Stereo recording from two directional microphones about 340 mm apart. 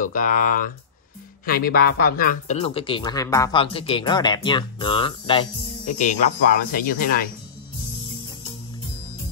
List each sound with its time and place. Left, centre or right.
0.0 s speech: left